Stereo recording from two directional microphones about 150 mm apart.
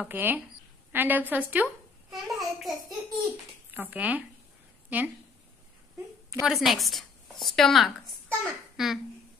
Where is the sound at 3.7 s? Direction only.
10° right (ahead or behind).